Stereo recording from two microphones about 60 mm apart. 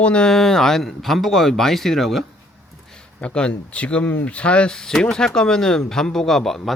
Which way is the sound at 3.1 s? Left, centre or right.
Centre.